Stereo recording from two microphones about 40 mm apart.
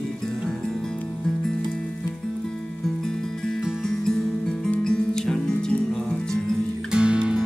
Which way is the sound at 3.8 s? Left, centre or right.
Centre.